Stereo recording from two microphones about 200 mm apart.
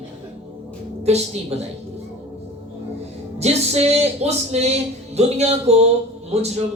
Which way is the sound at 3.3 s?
30° right (ahead or behind).